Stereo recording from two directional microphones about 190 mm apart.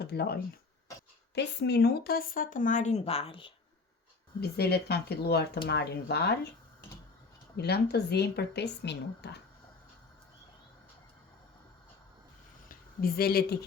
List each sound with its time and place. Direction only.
0.0 s speech: 60° left (ahead or behind)
1.4 s speech: 65° left (ahead or behind); by 3.5 s 30° left (ahead or behind)
4.4 s speech: 55° left (ahead or behind)
7.5 s speech: 60° left (ahead or behind)
12.6 s speech: 55° left (ahead or behind)